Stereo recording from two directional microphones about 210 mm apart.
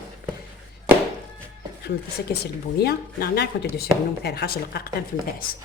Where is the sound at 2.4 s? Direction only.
50° left (ahead or behind).